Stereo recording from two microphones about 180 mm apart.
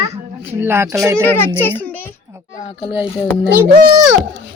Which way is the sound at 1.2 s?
10° left (ahead or behind).